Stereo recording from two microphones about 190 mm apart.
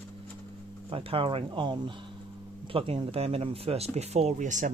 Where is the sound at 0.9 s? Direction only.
30° right (ahead or behind).